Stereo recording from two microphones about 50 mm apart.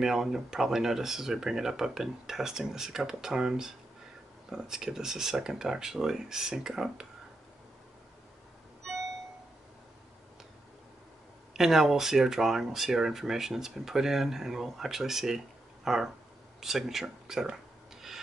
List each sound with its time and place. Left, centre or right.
0.0 s speech: centre
11.5 s speech: centre